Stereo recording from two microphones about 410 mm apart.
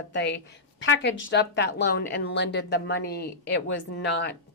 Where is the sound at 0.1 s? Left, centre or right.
Left.